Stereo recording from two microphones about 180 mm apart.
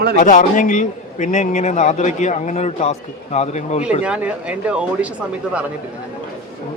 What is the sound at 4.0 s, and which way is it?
Speech, 5° right (ahead or behind).